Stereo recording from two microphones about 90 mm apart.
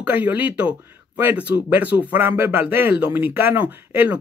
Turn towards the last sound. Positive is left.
turn(degrees=-20)  # may be behind; listen again after turning